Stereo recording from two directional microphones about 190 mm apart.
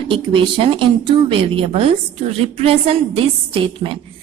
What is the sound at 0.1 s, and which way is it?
Speech, 30° right (ahead or behind).